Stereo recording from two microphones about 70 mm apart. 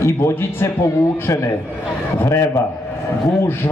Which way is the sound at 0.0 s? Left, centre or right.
Left.